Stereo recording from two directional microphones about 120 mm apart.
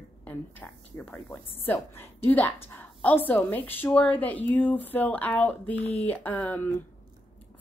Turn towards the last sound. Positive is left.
turn(degrees=15)  # may be behind; listen again after turning